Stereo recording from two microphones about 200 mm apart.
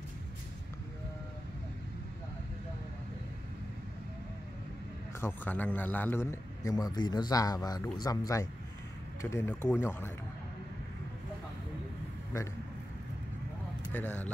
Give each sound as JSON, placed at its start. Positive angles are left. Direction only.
{"t": 5.2, "sound": "a man's voice", "side_deg": 10}
{"t": 9.2, "sound": "a man's voice", "side_deg": 10}
{"t": 13.9, "sound": "a man's voice", "side_deg": 10}